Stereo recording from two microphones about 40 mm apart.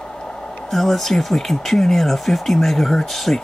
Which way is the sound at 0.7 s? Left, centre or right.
Centre.